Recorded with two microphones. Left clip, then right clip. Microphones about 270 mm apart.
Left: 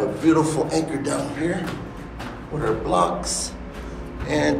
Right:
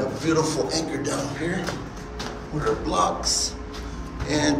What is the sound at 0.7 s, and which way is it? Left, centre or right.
Speech, centre.